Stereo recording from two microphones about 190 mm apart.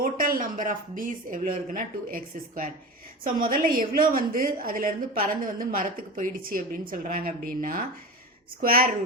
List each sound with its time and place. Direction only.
0.0 s a woman's voice: 45° right (ahead or behind)